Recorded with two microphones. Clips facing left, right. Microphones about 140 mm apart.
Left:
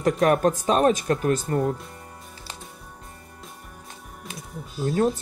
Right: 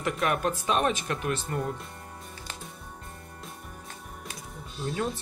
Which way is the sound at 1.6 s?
Centre (ahead or behind).